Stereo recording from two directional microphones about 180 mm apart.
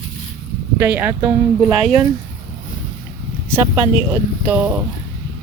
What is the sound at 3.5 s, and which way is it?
Speech, 15° right (ahead or behind).